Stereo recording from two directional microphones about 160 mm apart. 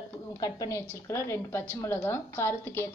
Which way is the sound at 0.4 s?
20° left (ahead or behind).